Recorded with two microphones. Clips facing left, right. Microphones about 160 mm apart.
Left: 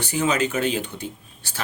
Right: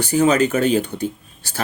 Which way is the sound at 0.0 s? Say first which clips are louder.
Right 7 dB; 40° right (ahead or behind).